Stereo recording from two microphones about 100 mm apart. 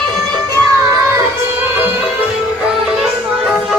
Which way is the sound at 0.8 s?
30° right (ahead or behind).